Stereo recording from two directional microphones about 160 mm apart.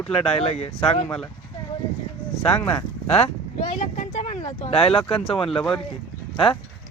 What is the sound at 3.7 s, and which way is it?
Vehicle, 50° left (ahead or behind).